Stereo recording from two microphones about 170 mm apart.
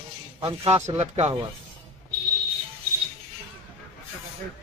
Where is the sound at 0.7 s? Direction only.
15° right (ahead or behind).